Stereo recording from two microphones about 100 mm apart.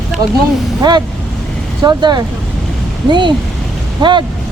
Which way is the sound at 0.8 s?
45° right (ahead or behind).